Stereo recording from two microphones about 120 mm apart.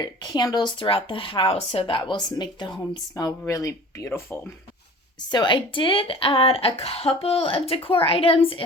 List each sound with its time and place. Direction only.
0.0 s speech: 40° left (ahead or behind); by 4.4 s 20° left (ahead or behind)
5.3 s speech: 40° left (ahead or behind)